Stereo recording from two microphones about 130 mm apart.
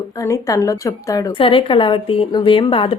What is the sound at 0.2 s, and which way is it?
A woman's voice, 25° left (ahead or behind).